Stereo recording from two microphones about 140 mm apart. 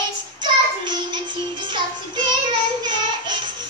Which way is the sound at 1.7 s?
35° right (ahead or behind).